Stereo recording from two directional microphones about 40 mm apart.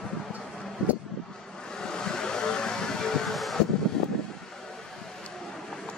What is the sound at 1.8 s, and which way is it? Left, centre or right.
Vehicle, centre.